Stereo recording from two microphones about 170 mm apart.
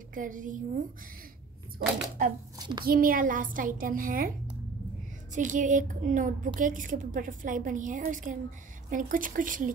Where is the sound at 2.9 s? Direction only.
55° right (ahead or behind).